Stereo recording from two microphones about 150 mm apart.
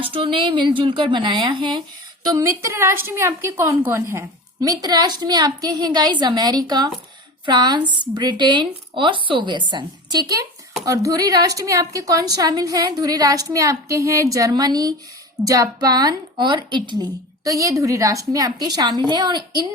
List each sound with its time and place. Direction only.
0.0 s a woman's voice: 40° right (ahead or behind)